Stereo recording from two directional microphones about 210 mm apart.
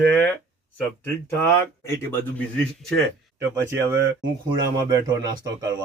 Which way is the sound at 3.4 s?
15° right (ahead or behind).